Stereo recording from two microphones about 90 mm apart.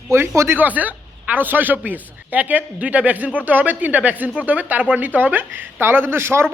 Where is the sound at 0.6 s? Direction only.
20° right (ahead or behind).